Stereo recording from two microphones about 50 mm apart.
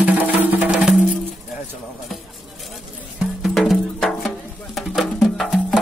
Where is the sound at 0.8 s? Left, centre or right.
Right.